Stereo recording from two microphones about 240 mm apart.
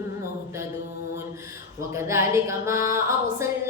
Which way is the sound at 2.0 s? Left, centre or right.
Centre.